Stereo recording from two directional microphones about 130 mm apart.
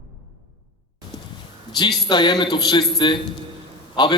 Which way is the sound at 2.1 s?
35° left (ahead or behind).